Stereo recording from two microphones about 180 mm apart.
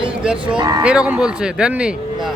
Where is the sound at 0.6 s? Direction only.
20° right (ahead or behind).